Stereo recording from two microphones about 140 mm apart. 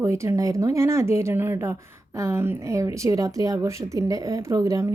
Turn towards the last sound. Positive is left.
turn(degrees=-20)  # may be behind; listen again after turning